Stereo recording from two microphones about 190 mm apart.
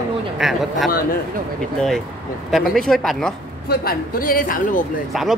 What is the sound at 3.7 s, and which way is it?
Speech, 50° left (ahead or behind).